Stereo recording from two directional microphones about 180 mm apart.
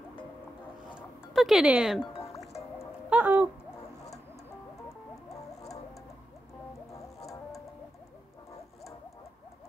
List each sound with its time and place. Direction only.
0.9 s music: centre (ahead or behind)
3.1 s owl: 10° right (ahead or behind)
4.8 s music: 20° left (ahead or behind)